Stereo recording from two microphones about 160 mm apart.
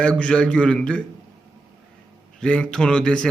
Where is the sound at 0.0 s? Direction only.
5° left (ahead or behind).